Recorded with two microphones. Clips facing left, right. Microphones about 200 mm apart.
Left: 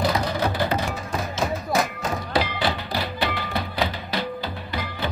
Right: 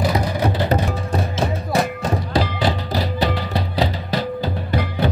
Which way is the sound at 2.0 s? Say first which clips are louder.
Right 4 dB; 40° right (ahead or behind).